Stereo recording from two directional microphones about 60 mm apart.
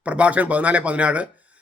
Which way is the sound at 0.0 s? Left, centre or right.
Right.